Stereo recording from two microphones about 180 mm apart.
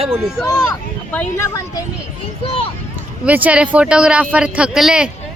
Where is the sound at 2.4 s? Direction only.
30° left (ahead or behind).